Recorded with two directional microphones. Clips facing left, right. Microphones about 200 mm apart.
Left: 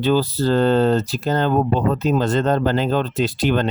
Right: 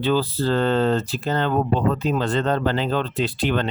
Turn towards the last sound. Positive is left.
turn(degrees=40)  # may be behind; listen again after turning